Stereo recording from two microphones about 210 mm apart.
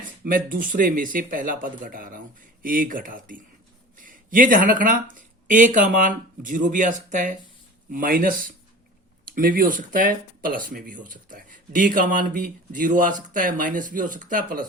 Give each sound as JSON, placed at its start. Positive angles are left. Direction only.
{"t": 0.0, "sound": "speech", "side_deg": -40}